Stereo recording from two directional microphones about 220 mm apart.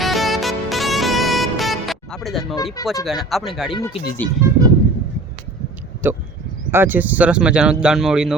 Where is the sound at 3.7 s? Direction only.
20° left (ahead or behind).